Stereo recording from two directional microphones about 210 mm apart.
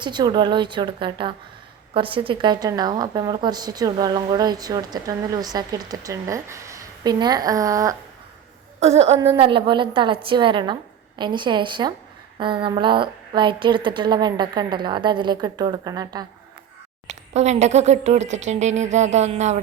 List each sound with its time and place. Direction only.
0.0 s speech: 20° right (ahead or behind)
8.8 s speech: 30° right (ahead or behind)
17.1 s speech: 30° right (ahead or behind)